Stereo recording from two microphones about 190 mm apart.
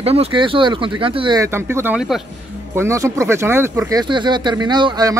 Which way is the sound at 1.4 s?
15° right (ahead or behind).